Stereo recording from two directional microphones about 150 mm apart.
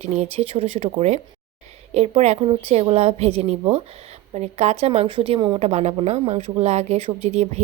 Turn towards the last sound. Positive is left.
turn(degrees=-45)  # may be behind; listen again after turning